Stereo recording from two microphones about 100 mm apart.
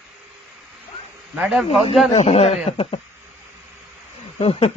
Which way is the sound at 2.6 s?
70° left (ahead or behind).